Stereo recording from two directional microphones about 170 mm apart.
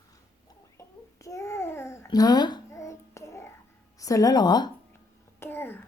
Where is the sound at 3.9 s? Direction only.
20° left (ahead or behind).